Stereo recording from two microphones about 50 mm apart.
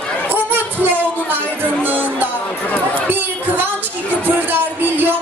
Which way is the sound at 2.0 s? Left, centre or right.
Right.